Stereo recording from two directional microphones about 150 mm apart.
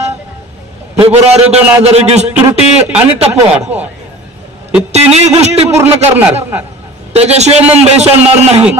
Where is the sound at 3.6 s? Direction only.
10° right (ahead or behind).